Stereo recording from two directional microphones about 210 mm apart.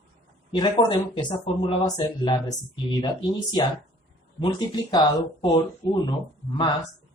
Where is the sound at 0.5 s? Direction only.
25° left (ahead or behind).